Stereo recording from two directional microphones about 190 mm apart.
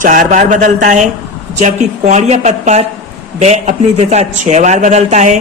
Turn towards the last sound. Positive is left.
turn(degrees=-40)  # may be behind; listen again after turning